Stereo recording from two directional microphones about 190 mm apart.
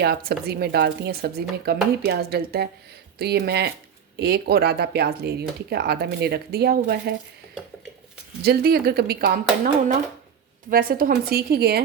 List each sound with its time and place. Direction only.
0.0 s speech: 55° right (ahead or behind)
8.4 s speech: 55° right (ahead or behind)